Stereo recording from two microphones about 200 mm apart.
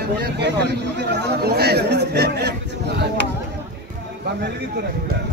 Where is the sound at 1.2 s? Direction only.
55° right (ahead or behind).